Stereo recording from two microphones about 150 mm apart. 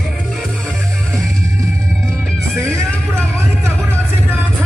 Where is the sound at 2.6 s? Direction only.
20° right (ahead or behind).